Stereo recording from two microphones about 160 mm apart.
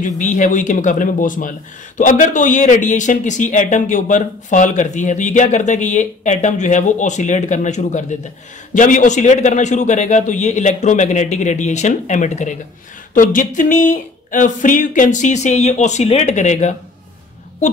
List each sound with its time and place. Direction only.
0.0 s a man's voice: 50° left (ahead or behind)